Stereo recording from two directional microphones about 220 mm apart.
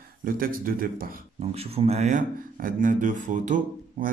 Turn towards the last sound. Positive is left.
turn(degrees=-40)  # may be behind; listen again after turning